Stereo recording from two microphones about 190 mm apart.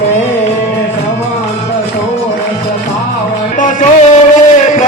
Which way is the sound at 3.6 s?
40° left (ahead or behind).